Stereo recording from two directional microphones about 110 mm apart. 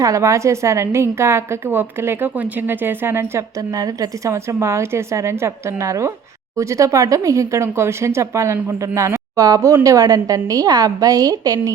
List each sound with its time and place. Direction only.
0.0 s a woman's voice: 30° right (ahead or behind)